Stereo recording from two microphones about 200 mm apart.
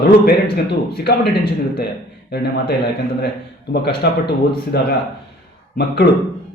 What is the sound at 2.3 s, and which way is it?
A man's voice, 55° left (ahead or behind).